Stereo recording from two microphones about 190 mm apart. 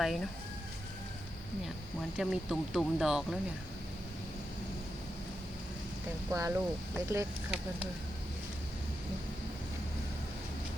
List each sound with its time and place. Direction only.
0.0 s speech: centre (ahead or behind)
2.1 s speech: 5° right (ahead or behind)
6.3 s speech: 15° right (ahead or behind)